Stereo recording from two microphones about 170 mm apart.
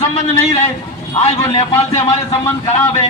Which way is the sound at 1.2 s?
35° left (ahead or behind).